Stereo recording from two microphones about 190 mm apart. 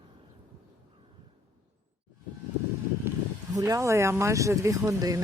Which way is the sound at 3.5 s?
20° right (ahead or behind).